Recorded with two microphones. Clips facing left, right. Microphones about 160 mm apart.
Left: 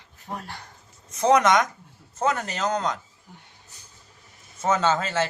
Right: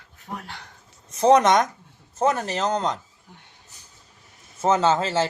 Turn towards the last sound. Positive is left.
turn(degrees=-30)  # may be behind; listen again after turning